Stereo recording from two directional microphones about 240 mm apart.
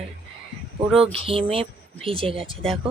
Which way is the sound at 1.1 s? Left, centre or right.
Right.